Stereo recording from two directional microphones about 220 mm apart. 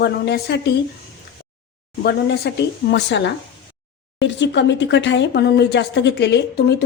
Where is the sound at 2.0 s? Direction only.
45° left (ahead or behind).